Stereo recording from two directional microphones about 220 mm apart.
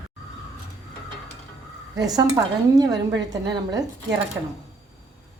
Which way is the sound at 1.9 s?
15° right (ahead or behind).